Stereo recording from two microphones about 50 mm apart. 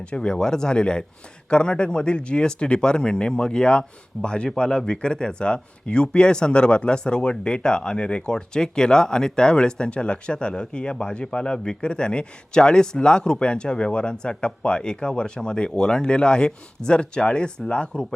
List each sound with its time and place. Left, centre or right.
0.1 s speech: centre